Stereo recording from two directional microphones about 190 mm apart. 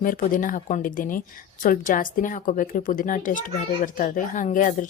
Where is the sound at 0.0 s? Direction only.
45° left (ahead or behind).